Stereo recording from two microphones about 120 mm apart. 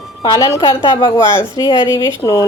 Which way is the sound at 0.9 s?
25° left (ahead or behind).